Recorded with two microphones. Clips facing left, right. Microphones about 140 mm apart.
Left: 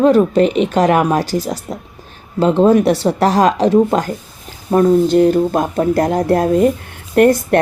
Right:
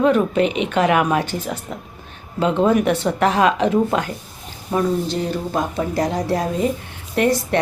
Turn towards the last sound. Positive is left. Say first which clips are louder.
# left 7 dB
turn(degrees=50)  # may be behind; listen again after turning